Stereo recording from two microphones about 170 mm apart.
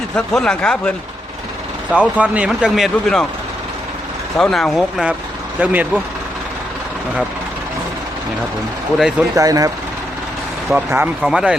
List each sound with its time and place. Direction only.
0.3 s speech: 5° left (ahead or behind)
1.9 s speech: 5° right (ahead or behind)
4.4 s speech: centre (ahead or behind)
9.0 s speech: 5° right (ahead or behind)
9.3 s speech: 20° right (ahead or behind)
10.7 s speech: 10° right (ahead or behind)